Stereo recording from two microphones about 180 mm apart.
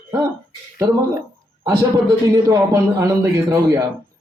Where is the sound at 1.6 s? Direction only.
20° right (ahead or behind).